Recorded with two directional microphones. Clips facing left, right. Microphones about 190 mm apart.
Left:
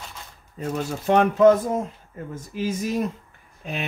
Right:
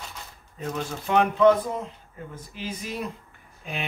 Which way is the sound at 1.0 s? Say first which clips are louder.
Left 3 dB; 40° left (ahead or behind).